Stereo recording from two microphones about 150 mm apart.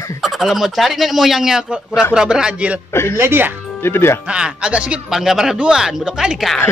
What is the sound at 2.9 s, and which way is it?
Speech, 15° left (ahead or behind).